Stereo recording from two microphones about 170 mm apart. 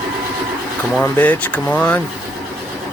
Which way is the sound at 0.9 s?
10° left (ahead or behind).